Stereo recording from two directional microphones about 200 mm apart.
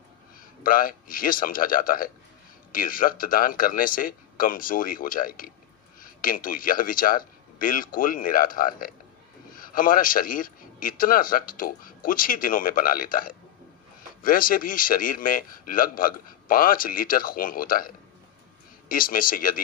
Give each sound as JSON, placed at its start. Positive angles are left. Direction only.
{"t": 0.6, "sound": "a man's voice", "side_deg": 45}